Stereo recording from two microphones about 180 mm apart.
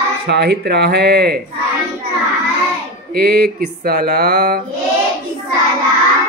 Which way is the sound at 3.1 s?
60° right (ahead or behind).